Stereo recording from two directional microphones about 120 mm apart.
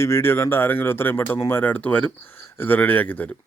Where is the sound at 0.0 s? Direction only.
20° left (ahead or behind).